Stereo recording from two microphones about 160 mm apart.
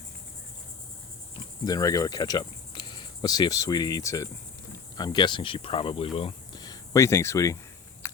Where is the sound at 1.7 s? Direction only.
25° left (ahead or behind).